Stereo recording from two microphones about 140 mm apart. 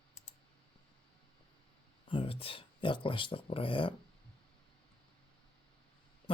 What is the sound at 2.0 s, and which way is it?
Speech, 40° left (ahead or behind).